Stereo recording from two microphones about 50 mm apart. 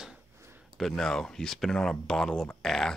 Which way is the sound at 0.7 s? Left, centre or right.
Centre.